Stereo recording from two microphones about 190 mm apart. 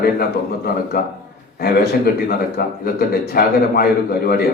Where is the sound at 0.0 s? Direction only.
55° left (ahead or behind).